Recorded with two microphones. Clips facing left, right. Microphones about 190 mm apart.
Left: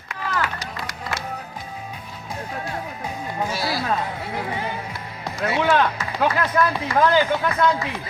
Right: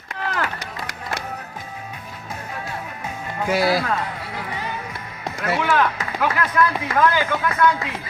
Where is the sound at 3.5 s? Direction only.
55° right (ahead or behind).